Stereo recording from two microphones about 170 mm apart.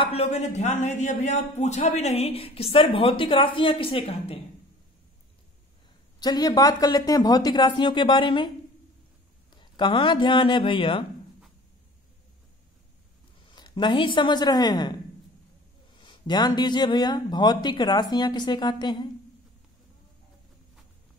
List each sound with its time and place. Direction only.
0.0 s a man's voice: 35° left (ahead or behind)
6.1 s a man's voice: 25° left (ahead or behind)
9.6 s a man's voice: 25° left (ahead or behind)
13.6 s a man's voice: 25° left (ahead or behind)
16.0 s a man's voice: 25° left (ahead or behind)